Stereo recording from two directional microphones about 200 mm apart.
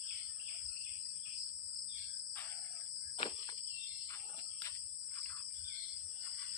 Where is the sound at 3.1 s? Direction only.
25° left (ahead or behind).